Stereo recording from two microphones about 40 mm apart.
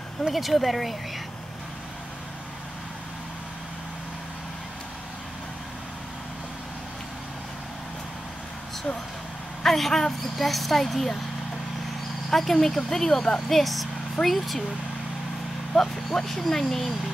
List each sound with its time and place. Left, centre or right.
0.3 s a woman's voice: centre
9.6 s a woman's voice: centre
12.3 s a woman's voice: centre
15.7 s speech: centre